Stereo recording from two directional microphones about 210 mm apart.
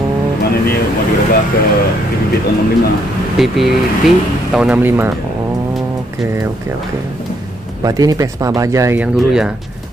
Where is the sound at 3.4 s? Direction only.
Centre (ahead or behind).